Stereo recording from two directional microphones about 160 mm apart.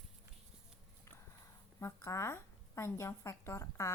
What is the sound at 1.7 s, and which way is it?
A woman's voice, 20° left (ahead or behind).